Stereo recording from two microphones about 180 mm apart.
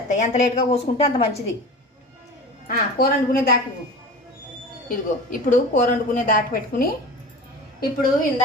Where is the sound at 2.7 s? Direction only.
55° left (ahead or behind).